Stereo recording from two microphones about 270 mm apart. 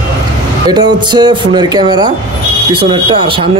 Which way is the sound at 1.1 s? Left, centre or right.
Centre.